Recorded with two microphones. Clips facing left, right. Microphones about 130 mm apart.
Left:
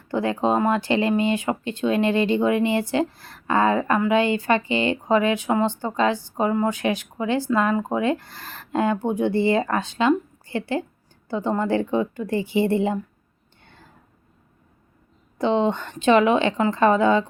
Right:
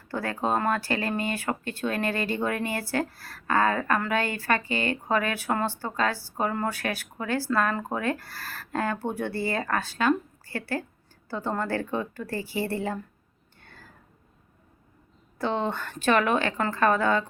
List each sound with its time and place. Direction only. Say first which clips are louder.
0.1 s speech: left 6 dB; 20° left (ahead or behind)
13.6 s a sound: left 1 dB; 20° left (ahead or behind)
15.4 s speech: left 7 dB; 20° left (ahead or behind)